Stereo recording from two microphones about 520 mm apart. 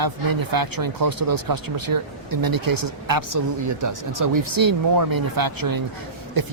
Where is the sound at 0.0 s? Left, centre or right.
Right.